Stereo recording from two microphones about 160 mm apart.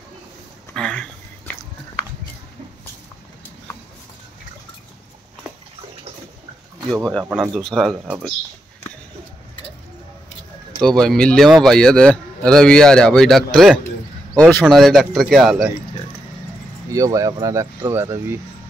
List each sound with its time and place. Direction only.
0.7 s a sound: 5° left (ahead or behind)
6.9 s a man's voice: centre (ahead or behind)
10.8 s a man's voice: 5° left (ahead or behind)
16.9 s speech: 20° right (ahead or behind)